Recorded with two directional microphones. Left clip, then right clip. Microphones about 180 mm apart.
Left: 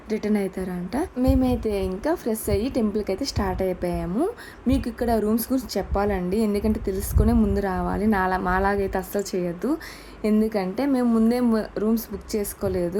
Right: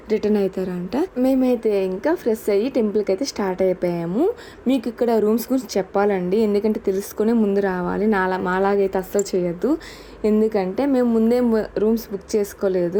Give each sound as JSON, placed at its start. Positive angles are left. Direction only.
{"t": 0.1, "sound": "a woman's voice", "side_deg": -5}